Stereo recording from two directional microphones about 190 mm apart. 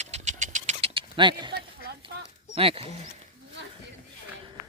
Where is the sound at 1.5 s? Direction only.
60° right (ahead or behind).